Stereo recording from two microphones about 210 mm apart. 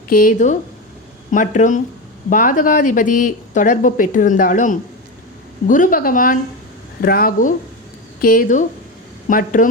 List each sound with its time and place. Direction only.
0.1 s speech: 40° left (ahead or behind)